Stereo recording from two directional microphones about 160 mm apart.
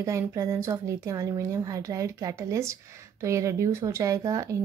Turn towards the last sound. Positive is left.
turn(degrees=-20)  # may be behind; listen again after turning